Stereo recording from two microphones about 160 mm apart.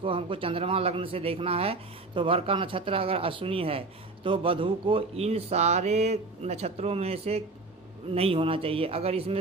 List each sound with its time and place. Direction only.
0.0 s speech: 35° right (ahead or behind)